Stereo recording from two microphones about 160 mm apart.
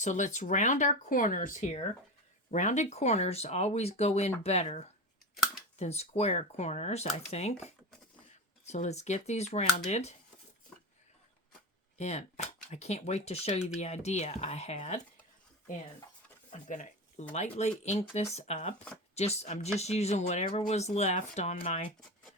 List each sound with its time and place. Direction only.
0.0 s speech: 50° left (ahead or behind)
11.9 s speech: 45° left (ahead or behind)
16.5 s a sound: 50° left (ahead or behind)
17.3 s speech: 45° left (ahead or behind)